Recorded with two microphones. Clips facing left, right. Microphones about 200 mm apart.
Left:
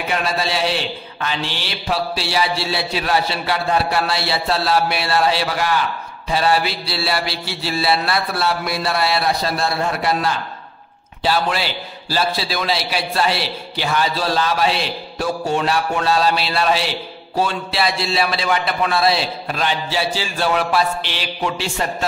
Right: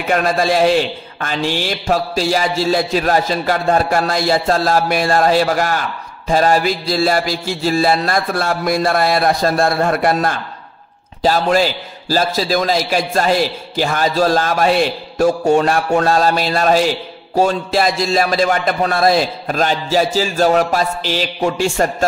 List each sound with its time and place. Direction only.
0.1 s a man's voice: 50° right (ahead or behind)